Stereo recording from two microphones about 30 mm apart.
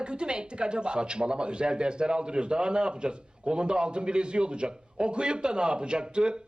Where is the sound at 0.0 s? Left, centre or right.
Right.